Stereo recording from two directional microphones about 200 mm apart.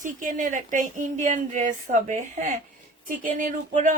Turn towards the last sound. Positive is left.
turn(degrees=-40)  # may be behind; listen again after turning